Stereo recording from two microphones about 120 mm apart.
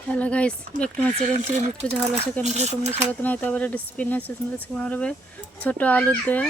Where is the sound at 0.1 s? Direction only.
10° left (ahead or behind).